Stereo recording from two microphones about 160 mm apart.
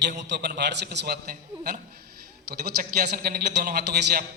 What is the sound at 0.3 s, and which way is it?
A man's voice, 90° right.